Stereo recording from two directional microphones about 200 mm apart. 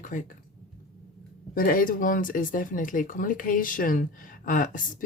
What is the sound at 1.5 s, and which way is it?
Speech, 45° left (ahead or behind).